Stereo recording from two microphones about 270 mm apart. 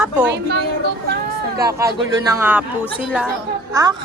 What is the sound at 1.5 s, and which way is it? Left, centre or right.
A child's voice, centre.